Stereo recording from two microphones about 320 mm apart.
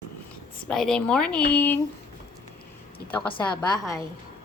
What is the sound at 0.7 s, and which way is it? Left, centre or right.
A woman's voice, centre.